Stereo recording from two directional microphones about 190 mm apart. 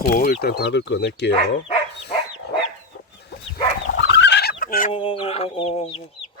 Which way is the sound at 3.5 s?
65° left (ahead or behind).